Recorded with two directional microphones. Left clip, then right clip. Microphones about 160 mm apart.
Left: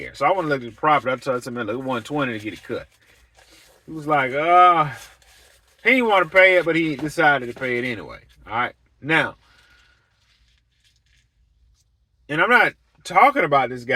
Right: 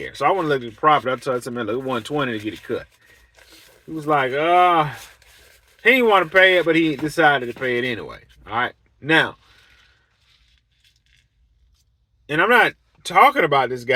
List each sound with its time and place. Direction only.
0.0 s speech: 20° right (ahead or behind)
4.0 s speech: 20° right (ahead or behind)
12.2 s speech: 15° right (ahead or behind)